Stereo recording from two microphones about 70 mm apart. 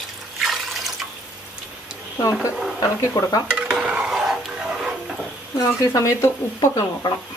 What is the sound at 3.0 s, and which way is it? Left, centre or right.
Speech, left.